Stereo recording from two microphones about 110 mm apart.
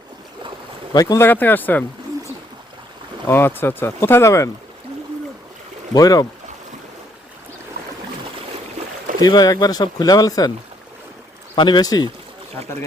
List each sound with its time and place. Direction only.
0.9 s speech: 35° left (ahead or behind)
1.2 s speech: 15° left (ahead or behind)
3.2 s speech: 20° left (ahead or behind)
5.9 s speech: 35° left (ahead or behind)
9.2 s speech: 35° left (ahead or behind)
11.5 s speech: 45° left (ahead or behind)